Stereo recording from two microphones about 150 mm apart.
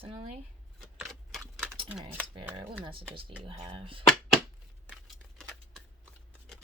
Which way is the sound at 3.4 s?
35° right (ahead or behind).